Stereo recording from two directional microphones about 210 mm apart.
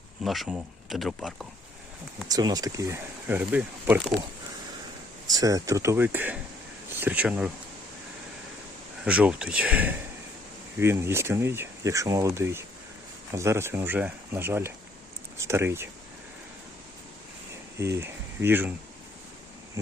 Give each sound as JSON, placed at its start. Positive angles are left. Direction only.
{"t": 0.2, "sound": "speech", "side_deg": 0}
{"t": 2.3, "sound": "speech", "side_deg": -20}
{"t": 5.3, "sound": "speech", "side_deg": -15}
{"t": 9.0, "sound": "speech", "side_deg": -5}
{"t": 17.7, "sound": "speech", "side_deg": -15}